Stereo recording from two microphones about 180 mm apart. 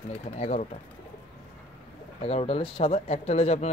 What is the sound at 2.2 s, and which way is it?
Speech, 35° left (ahead or behind).